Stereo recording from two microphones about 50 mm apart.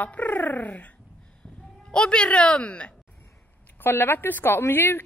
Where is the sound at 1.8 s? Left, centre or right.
Centre.